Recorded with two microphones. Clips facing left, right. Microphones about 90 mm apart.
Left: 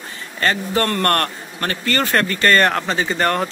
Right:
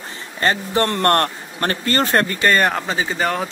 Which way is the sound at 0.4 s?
20° right (ahead or behind).